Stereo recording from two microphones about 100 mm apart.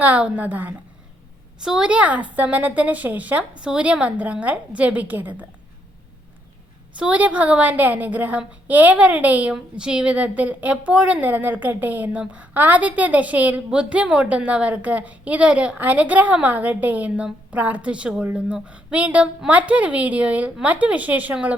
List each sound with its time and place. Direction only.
0.0 s a woman's voice: 15° right (ahead or behind)
6.9 s a woman's voice: 10° right (ahead or behind)